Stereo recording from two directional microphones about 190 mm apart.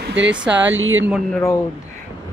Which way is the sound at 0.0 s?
75° right (ahead or behind).